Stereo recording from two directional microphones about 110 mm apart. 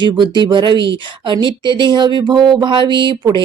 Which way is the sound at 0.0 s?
45° right (ahead or behind).